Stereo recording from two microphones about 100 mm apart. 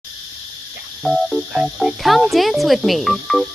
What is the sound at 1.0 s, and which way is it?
Speech, centre (ahead or behind).